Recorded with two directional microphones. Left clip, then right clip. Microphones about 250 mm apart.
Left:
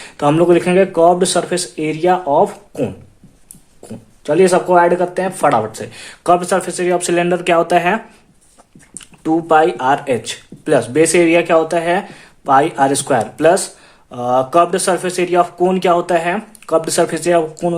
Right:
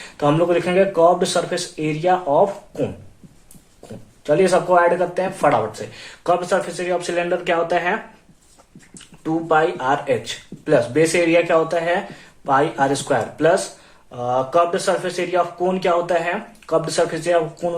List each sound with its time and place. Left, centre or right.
0.2 s speech: left
9.2 s speech: left